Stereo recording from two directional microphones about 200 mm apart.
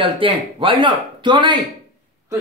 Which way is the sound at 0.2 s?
25° right (ahead or behind).